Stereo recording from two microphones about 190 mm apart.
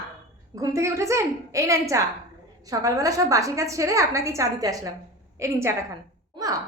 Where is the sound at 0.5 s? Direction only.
15° right (ahead or behind).